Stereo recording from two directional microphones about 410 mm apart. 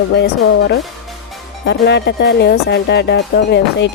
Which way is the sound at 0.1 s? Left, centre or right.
Left.